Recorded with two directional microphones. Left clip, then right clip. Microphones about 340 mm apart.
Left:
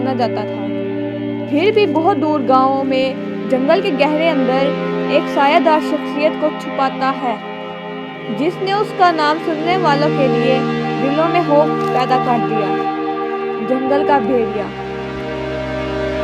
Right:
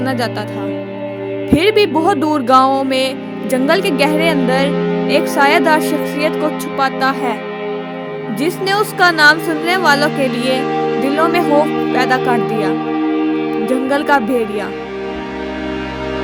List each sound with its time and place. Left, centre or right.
0.0 s speech: right
1.5 s music: right
3.5 s speech: right
8.4 s speech: right
11.2 s speech: right
13.7 s speech: right